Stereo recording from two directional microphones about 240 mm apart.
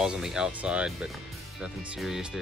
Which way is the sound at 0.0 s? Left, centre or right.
Centre.